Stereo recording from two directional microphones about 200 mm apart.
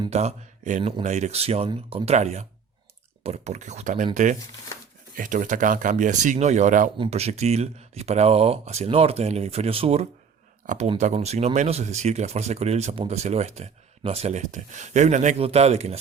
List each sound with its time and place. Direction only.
0.1 s speech: 35° right (ahead or behind)
6.9 s speech: 30° right (ahead or behind)